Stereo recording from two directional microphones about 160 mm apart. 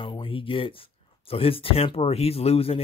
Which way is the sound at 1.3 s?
35° left (ahead or behind).